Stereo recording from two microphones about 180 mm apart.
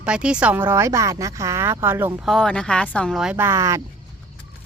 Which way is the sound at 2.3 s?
5° left (ahead or behind).